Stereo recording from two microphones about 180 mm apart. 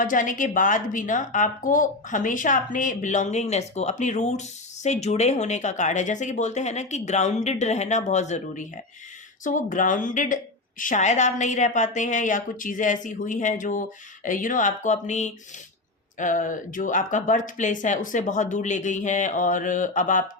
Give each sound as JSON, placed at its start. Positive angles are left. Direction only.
{"t": 0.0, "sound": "a woman's voice", "side_deg": 50}